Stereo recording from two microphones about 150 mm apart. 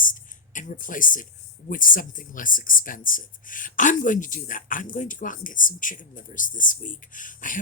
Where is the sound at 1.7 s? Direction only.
65° left (ahead or behind).